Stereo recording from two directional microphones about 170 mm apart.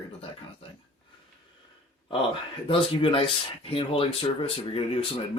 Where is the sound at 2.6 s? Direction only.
30° left (ahead or behind).